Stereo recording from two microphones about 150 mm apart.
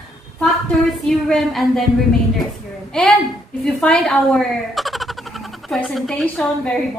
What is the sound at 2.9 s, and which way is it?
A woman's voice, 5° left (ahead or behind).